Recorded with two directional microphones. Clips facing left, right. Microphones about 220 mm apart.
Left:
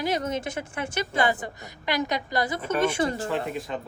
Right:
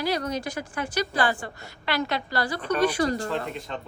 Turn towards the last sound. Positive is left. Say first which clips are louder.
# left 3 dB
turn(degrees=0)  # may be behind; listen again after turning